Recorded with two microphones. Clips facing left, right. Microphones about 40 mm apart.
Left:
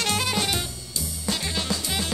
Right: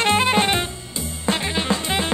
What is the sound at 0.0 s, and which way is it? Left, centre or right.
Music, right.